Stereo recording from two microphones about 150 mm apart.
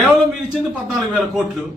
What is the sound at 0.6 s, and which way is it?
A man's voice, centre (ahead or behind).